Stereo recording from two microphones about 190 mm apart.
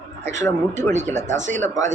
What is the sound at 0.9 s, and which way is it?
Speech, 40° right (ahead or behind).